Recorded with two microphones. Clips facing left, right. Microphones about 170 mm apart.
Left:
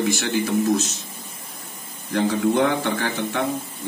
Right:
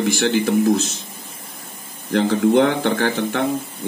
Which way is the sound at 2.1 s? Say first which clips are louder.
Right 4 dB; 65° right (ahead or behind).